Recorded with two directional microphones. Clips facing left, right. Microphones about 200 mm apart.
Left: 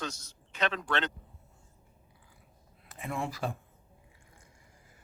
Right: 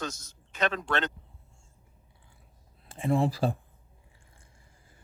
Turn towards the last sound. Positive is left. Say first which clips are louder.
# right 9 dB
turn(degrees=-30)  # may be behind; listen again after turning